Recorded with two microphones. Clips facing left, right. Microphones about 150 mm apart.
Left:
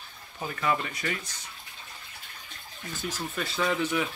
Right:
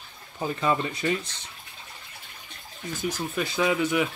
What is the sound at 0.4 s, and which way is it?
Speech, 25° right (ahead or behind).